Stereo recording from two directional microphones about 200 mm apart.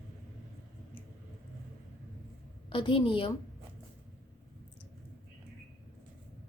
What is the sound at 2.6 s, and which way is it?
Speech, 25° left (ahead or behind).